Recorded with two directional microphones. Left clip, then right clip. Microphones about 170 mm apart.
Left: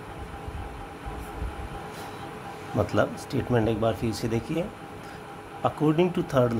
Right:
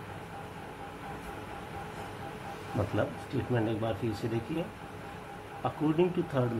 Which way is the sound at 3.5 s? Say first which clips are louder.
Left 8 dB; 70° left (ahead or behind).